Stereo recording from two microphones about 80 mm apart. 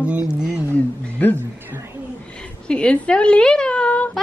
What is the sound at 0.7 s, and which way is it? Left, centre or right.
Speech, left.